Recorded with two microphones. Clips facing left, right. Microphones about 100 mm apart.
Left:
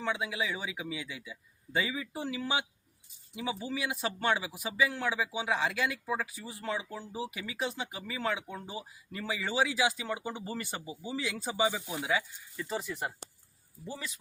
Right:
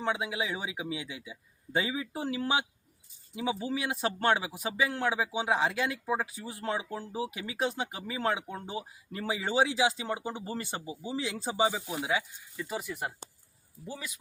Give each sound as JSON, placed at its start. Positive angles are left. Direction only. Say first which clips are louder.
{"t": 0.0, "sound": "speech", "louder": "right 2 dB", "side_deg": -30}
{"t": 5.1, "sound": "speech", "louder": "right 3 dB", "side_deg": -25}